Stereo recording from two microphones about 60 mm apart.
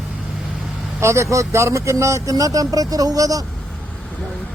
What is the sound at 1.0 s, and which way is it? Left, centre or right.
Speech, right.